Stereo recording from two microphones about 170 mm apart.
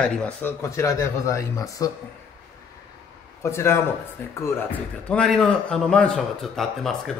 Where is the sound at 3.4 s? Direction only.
15° left (ahead or behind).